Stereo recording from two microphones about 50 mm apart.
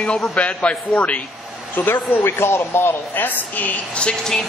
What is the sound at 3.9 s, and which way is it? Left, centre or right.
Speech, centre.